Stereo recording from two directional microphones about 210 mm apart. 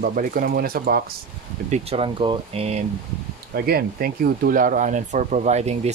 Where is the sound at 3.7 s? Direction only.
45° right (ahead or behind).